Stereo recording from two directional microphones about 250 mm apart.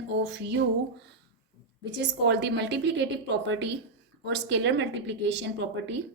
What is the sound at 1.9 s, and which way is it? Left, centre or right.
Speech, right.